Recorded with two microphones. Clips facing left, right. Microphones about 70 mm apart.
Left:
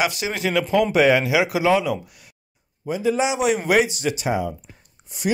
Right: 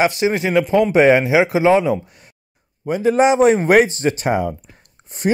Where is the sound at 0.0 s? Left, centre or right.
Right.